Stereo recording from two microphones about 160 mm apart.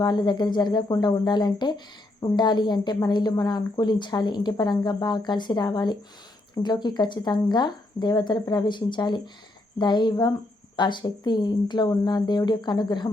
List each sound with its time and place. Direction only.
0.0 s a woman's voice: 25° left (ahead or behind)